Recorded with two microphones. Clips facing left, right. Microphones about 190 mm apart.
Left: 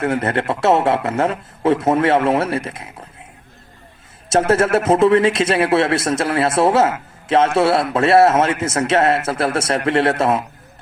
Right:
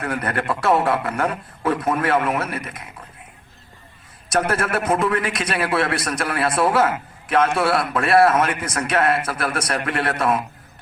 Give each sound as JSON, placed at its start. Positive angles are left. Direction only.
{"t": 0.0, "sound": "a man's voice", "side_deg": 25}
{"t": 4.3, "sound": "a man's voice", "side_deg": 25}